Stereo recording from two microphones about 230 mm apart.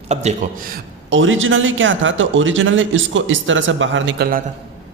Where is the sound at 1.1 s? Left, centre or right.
Right.